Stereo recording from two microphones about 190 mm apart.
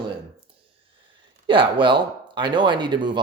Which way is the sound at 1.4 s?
25° right (ahead or behind).